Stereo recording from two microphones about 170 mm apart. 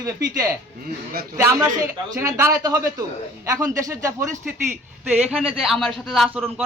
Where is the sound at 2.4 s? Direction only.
15° right (ahead or behind).